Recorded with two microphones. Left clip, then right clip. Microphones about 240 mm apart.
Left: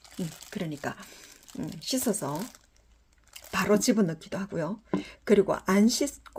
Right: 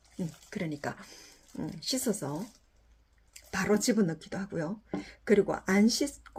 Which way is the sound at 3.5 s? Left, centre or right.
Left.